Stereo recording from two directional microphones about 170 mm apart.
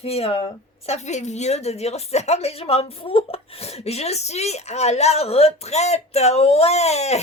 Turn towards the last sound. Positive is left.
turn(degrees=40)  # may be behind; listen again after turning